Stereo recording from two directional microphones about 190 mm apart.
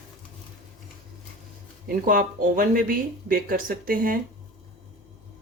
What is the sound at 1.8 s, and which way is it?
Speech, 50° right (ahead or behind).